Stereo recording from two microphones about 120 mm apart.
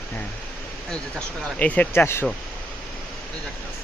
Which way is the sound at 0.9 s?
10° left (ahead or behind).